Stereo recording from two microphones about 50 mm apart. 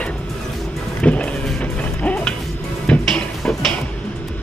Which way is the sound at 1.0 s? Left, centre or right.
Left.